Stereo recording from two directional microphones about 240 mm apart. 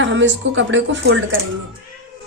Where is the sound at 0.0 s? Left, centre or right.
Right.